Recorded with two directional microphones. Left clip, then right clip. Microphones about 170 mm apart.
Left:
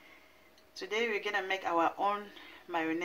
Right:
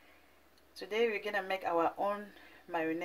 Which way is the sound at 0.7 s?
45° right (ahead or behind).